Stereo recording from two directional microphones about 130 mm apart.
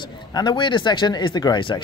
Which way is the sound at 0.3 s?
35° left (ahead or behind).